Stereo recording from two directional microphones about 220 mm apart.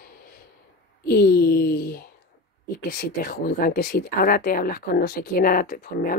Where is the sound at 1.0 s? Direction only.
45° left (ahead or behind).